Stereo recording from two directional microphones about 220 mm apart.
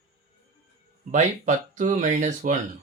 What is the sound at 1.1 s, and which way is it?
Speech, 35° right (ahead or behind).